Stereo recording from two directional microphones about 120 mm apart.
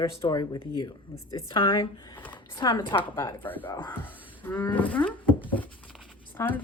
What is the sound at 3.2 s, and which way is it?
Wild animals, 15° left (ahead or behind).